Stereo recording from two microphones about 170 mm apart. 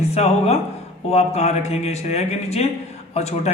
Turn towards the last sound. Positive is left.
turn(degrees=40)  # may be behind; listen again after turning